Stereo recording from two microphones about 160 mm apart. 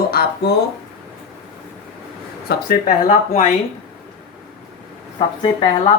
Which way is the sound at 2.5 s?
60° left (ahead or behind).